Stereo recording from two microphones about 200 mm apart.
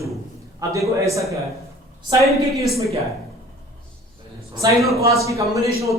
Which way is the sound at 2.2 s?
Centre (ahead or behind).